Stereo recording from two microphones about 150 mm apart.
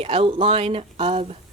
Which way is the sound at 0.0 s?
40° right (ahead or behind).